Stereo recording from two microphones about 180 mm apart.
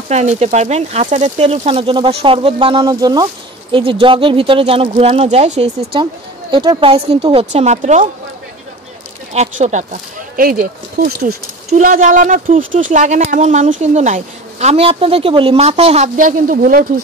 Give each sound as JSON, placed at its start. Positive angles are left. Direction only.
{"t": 0.1, "sound": "speech", "side_deg": -40}
{"t": 6.5, "sound": "speech", "side_deg": -25}
{"t": 9.3, "sound": "speech", "side_deg": -40}
{"t": 10.3, "sound": "speech", "side_deg": -50}
{"t": 11.0, "sound": "speech", "side_deg": -65}
{"t": 11.7, "sound": "speech", "side_deg": -45}
{"t": 16.2, "sound": "speech", "side_deg": -50}